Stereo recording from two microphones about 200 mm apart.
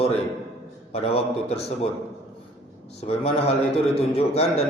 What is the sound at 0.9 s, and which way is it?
Speech, 30° left (ahead or behind).